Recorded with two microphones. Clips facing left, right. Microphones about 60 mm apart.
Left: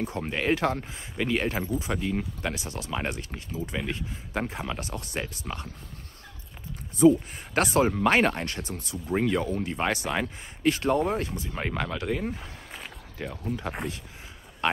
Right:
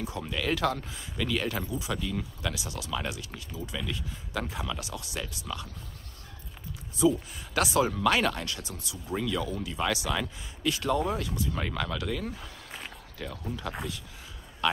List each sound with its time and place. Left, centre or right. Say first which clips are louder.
0.0 s speech: left 4 dB; left
7.0 s speech: left 6 dB; left
12.7 s a sound: left 2 dB; left
13.5 s speech: left 4 dB; left